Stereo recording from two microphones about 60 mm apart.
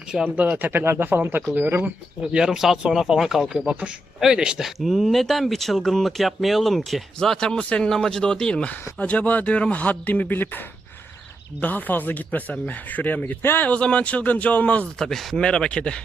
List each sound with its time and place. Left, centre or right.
0.1 s speech: centre
0.5 s speech: right
2.2 s speech: centre
3.7 s speech: centre; by 10.6 s left
11.6 s speech: left
13.4 s speech: left
13.7 s speech: centre
14.9 s speech: centre
15.4 s speech: centre